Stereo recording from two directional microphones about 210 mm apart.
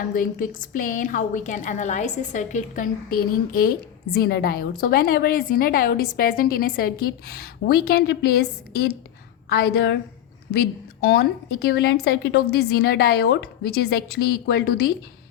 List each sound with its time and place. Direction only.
0.1 s a woman's voice: 40° left (ahead or behind)